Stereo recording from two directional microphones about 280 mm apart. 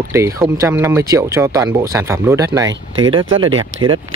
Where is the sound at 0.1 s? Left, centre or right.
Centre.